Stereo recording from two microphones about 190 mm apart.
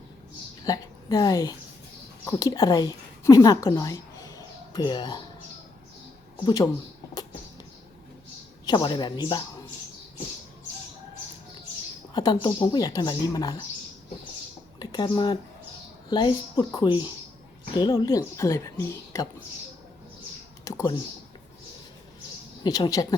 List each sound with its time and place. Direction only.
0.6 s a woman's voice: 20° left (ahead or behind)
6.3 s speech: 20° left (ahead or behind)
8.6 s a woman's voice: 25° left (ahead or behind)
12.1 s a woman's voice: 25° left (ahead or behind)
14.8 s a woman's voice: 25° left (ahead or behind)
20.7 s a sound: 15° left (ahead or behind)
22.6 s a woman's voice: 20° left (ahead or behind)